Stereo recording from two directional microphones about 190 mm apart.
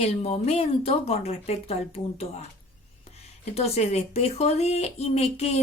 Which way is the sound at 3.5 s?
35° left (ahead or behind).